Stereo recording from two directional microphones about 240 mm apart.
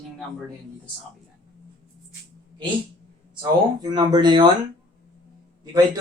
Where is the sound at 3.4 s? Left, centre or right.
Centre.